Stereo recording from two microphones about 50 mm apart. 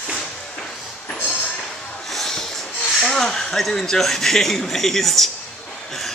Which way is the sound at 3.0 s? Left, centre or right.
Centre.